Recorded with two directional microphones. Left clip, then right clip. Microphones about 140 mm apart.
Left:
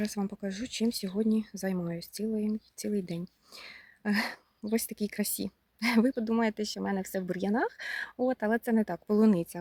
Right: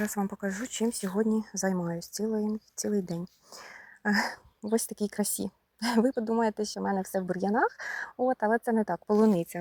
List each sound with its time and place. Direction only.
0.0 s speech: 30° left (ahead or behind)
0.8 s speech: 15° left (ahead or behind); by 4.8 s 30° left (ahead or behind)
4.8 s speech: 5° left (ahead or behind)
6.7 s speech: 45° left (ahead or behind)
9.0 s speech: 15° left (ahead or behind)